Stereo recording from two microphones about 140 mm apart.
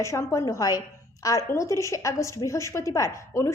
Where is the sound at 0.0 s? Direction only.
20° left (ahead or behind).